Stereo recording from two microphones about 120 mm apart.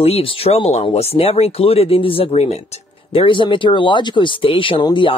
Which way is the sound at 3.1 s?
45° left (ahead or behind).